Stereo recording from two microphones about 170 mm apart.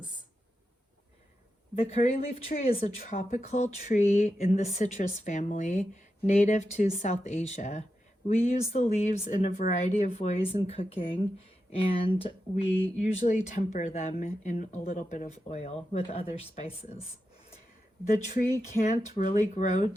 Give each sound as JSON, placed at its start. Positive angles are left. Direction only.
{"t": 1.7, "sound": "speech", "side_deg": 35}
{"t": 18.0, "sound": "speech", "side_deg": 40}